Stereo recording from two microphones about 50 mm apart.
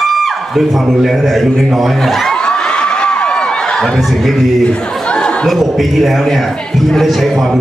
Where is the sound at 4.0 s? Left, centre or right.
Centre.